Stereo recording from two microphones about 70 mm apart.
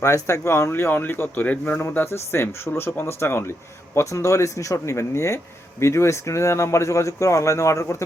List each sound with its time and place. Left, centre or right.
0.0 s a man's voice: left
3.9 s speech: left